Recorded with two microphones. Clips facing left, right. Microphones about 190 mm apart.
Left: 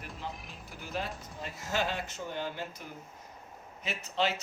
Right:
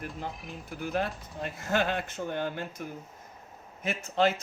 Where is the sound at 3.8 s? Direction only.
50° right (ahead or behind).